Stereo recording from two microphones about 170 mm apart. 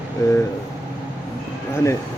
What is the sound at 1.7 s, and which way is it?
Speech, 15° left (ahead or behind).